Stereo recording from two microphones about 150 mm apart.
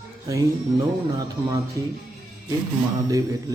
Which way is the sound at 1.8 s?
20° right (ahead or behind).